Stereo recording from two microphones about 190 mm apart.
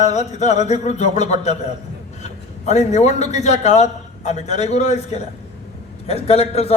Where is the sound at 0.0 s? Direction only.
35° left (ahead or behind).